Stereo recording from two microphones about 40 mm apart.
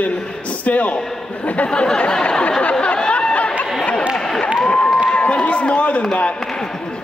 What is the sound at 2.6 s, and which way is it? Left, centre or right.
Chatter, left.